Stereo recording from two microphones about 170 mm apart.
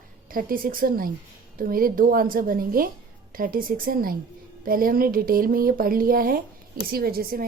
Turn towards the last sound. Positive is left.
turn(degrees=-60)  # may be behind; listen again after turning